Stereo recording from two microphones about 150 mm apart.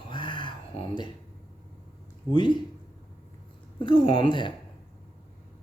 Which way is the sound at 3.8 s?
35° left (ahead or behind).